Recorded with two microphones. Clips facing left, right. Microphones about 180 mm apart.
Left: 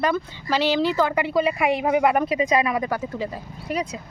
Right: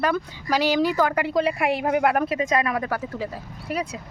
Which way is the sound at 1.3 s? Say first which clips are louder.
Left 1 dB; 5° left (ahead or behind).